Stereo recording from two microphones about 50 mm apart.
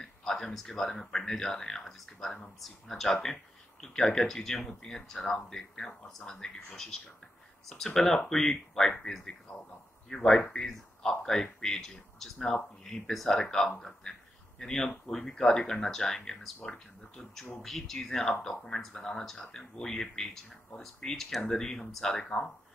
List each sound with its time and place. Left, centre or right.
0.0 s speech: centre
22.1 s speech: left